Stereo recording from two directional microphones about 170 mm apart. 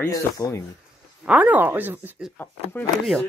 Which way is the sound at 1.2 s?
10° right (ahead or behind).